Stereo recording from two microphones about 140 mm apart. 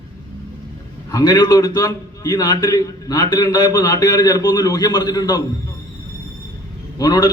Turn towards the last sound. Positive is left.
turn(degrees=25)  # may be behind; listen again after turning